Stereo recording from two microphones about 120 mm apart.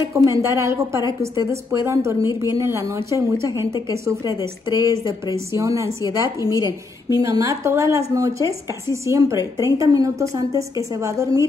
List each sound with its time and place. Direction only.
0.1 s a woman's voice: 25° right (ahead or behind)